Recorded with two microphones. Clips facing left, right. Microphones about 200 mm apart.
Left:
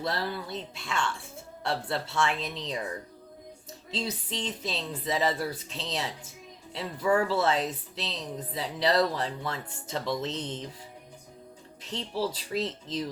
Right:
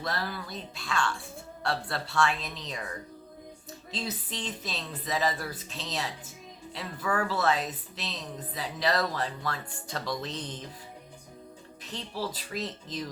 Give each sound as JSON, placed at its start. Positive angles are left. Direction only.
{"t": 0.0, "sound": "a woman's voice", "side_deg": 25}
{"t": 3.9, "sound": "a woman's voice", "side_deg": 25}
{"t": 11.8, "sound": "a woman's voice", "side_deg": 25}